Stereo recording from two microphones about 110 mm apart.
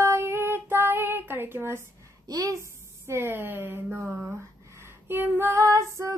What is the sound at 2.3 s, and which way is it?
Female singing, 30° right (ahead or behind).